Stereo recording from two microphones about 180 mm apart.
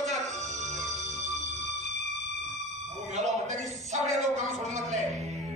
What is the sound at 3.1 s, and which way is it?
A man's voice, 40° right (ahead or behind).